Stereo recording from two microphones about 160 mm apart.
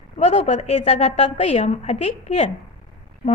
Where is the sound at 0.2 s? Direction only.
45° left (ahead or behind).